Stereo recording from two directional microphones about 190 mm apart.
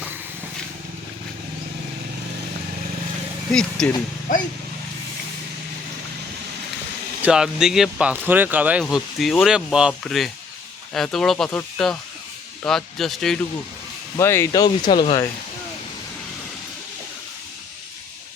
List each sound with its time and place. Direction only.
3.5 s speech: 5° left (ahead or behind)
7.2 s speech: 5° right (ahead or behind)
14.2 s speech: 15° left (ahead or behind)